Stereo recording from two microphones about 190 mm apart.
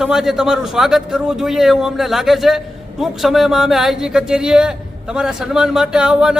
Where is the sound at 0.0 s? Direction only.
Centre (ahead or behind).